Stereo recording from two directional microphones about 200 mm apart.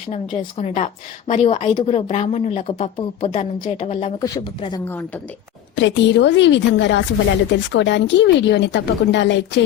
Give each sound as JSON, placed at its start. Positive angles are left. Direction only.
{"t": 0.1, "sound": "speech", "side_deg": 30}
{"t": 4.2, "sound": "speech", "side_deg": 20}
{"t": 5.7, "sound": "a woman's voice", "side_deg": 65}